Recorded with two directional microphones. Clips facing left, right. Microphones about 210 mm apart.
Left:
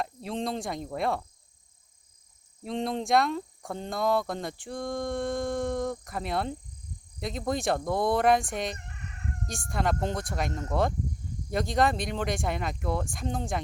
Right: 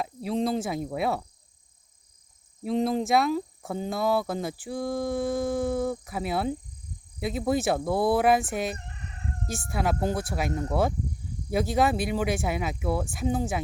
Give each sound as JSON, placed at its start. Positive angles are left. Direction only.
{"t": 0.0, "sound": "speech", "side_deg": -5}
{"t": 2.6, "sound": "speech", "side_deg": -5}
{"t": 8.9, "sound": "fowl", "side_deg": -35}
{"t": 9.5, "sound": "speech", "side_deg": -5}